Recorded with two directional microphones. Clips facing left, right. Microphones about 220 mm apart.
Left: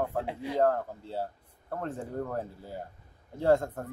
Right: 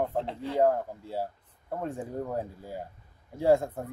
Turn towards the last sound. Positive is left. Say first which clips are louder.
# right 1 dB
turn(degrees=-10)  # may be behind; listen again after turning